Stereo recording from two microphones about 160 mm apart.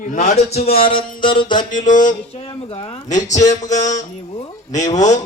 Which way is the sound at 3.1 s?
20° left (ahead or behind).